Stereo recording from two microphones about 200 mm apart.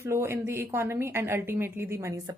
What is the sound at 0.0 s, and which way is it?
Speech, 15° right (ahead or behind).